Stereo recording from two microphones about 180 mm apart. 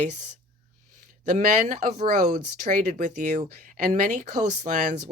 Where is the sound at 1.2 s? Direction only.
50° right (ahead or behind).